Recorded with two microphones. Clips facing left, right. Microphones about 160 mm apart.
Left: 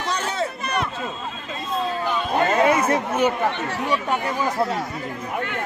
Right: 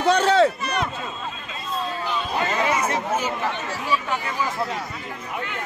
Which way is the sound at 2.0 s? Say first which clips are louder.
Left 5 dB; 50° left (ahead or behind).